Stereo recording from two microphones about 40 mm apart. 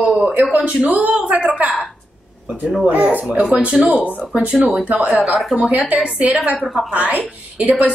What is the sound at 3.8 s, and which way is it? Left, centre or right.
A man's voice, right.